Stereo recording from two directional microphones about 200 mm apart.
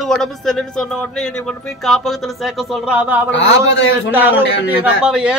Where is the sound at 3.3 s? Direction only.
65° left (ahead or behind).